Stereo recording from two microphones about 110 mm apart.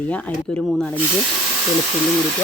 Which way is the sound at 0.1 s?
10° left (ahead or behind).